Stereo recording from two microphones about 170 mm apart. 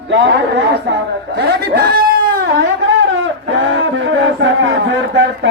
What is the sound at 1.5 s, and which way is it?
Speech, 70° right (ahead or behind).